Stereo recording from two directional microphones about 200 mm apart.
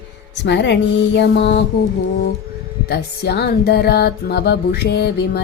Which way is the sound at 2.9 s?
55° left (ahead or behind).